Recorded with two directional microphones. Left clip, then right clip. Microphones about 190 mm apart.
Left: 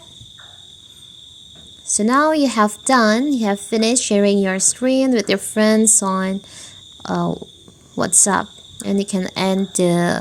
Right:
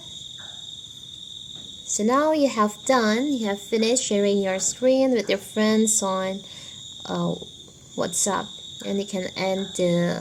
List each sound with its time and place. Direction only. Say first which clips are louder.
1.9 s a woman's voice: left 5 dB; 35° left (ahead or behind)